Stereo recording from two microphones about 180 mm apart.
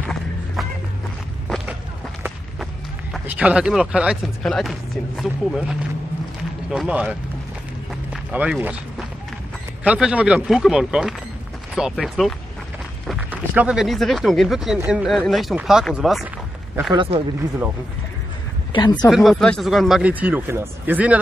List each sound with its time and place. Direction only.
2.2 s speech: 5° right (ahead or behind)
7.9 s run: 5° right (ahead or behind)
9.8 s speech: 5° right (ahead or behind)
16.9 s speech: 30° right (ahead or behind)
18.7 s speech: 25° left (ahead or behind)
19.0 s speech: centre (ahead or behind)